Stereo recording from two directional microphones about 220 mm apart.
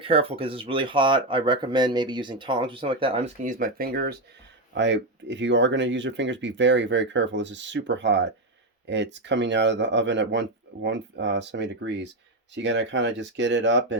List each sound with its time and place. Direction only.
0.0 s speech: 25° right (ahead or behind); by 13.9 s 55° right (ahead or behind)